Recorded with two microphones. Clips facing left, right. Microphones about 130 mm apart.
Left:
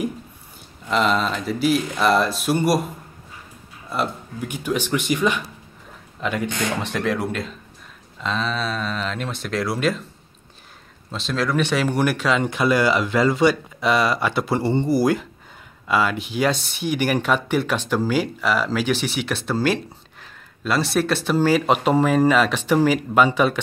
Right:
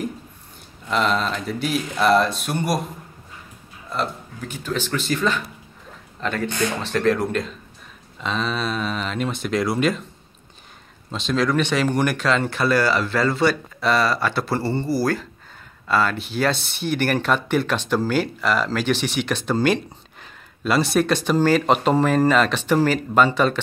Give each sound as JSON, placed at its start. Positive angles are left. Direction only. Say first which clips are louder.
{"t": 0.8, "sound": "speech", "louder": "left 1 dB", "side_deg": 0}
{"t": 3.9, "sound": "speech", "louder": "left 1 dB", "side_deg": 10}
{"t": 11.1, "sound": "speech", "louder": "right 2 dB", "side_deg": 0}